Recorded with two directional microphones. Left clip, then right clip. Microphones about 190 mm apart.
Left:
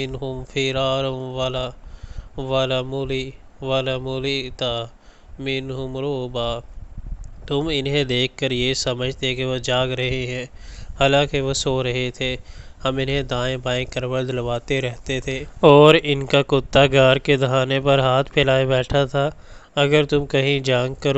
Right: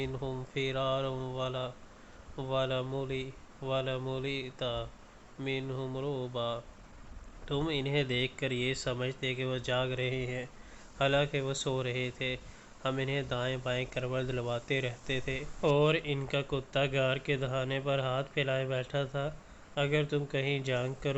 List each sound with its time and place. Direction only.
0.0 s speech: 35° left (ahead or behind)